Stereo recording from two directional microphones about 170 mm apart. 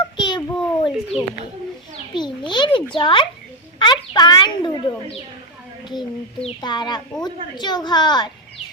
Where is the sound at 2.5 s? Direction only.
25° left (ahead or behind).